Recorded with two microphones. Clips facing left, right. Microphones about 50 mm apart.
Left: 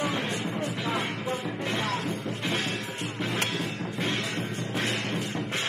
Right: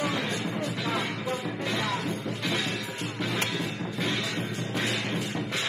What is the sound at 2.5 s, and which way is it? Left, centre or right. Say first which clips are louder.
Music: even; left.